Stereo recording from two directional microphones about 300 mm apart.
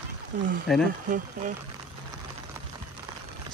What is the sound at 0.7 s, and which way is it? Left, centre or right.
Speech, centre.